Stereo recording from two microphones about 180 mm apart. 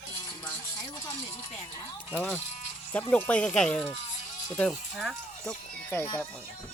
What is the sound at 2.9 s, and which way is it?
Speech, 5° left (ahead or behind).